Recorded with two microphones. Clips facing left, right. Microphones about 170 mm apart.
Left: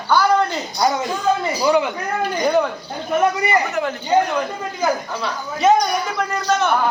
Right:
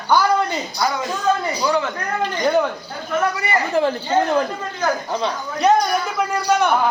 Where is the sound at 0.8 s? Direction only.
25° left (ahead or behind).